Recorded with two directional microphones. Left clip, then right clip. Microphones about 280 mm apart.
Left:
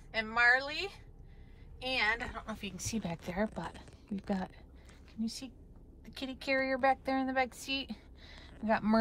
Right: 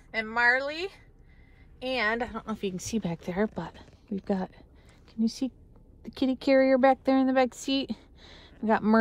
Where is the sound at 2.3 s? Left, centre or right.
Right.